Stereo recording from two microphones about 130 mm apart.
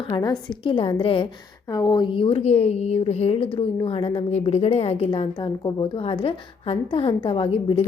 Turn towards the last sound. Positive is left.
turn(degrees=45)  # may be behind; listen again after turning